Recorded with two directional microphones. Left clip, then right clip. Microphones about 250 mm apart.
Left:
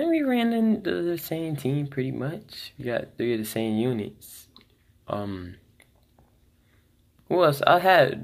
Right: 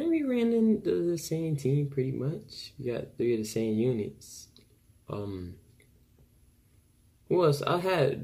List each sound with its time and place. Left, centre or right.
0.0 s speech: centre
7.2 s speech: centre